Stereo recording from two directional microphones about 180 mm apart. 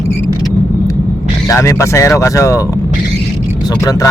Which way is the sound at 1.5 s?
15° left (ahead or behind).